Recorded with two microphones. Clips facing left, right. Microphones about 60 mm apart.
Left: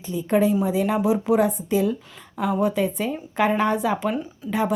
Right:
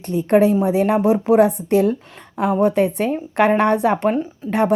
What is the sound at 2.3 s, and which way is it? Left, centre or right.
Speech, right.